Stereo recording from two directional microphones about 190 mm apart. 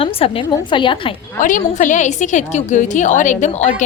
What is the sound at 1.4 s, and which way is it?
A woman's voice, 45° left (ahead or behind).